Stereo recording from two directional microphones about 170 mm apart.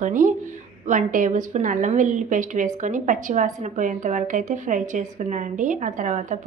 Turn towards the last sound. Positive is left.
turn(degrees=-45)  # may be behind; listen again after turning